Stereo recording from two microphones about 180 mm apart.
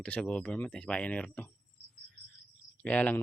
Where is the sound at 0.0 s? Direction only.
5° left (ahead or behind).